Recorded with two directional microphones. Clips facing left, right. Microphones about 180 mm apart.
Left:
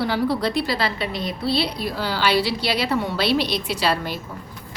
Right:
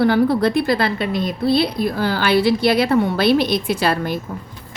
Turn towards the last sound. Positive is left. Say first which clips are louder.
# right 4 dB
turn(degrees=-50)  # may be behind; listen again after turning